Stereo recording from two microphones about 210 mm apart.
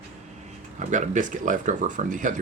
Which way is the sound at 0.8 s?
35° right (ahead or behind).